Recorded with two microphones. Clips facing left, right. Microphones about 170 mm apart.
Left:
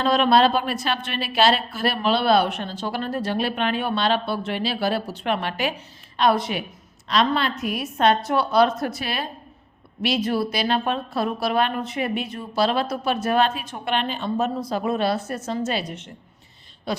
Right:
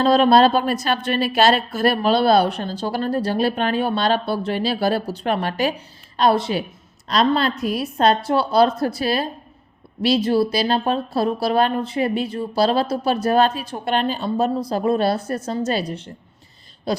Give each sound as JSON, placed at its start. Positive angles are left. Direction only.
{"t": 0.0, "sound": "a woman's voice", "side_deg": -35}
{"t": 16.9, "sound": "owl", "side_deg": -40}